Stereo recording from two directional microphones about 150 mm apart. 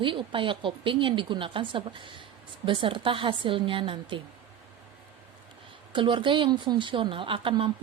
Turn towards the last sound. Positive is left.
turn(degrees=-35)  # may be behind; listen again after turning